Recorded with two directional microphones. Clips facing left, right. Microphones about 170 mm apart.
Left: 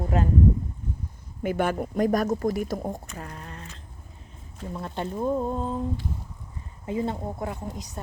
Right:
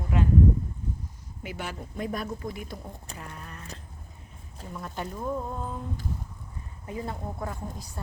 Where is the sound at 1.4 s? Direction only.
50° left (ahead or behind).